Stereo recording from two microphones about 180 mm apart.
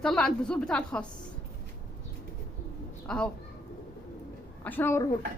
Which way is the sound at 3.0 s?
5° left (ahead or behind).